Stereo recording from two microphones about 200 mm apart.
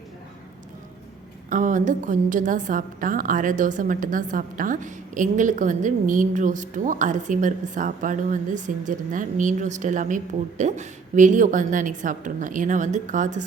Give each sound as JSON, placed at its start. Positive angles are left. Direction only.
{"t": 1.5, "sound": "a woman's voice", "side_deg": -40}